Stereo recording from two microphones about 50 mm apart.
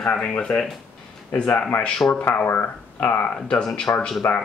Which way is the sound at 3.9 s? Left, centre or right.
Left.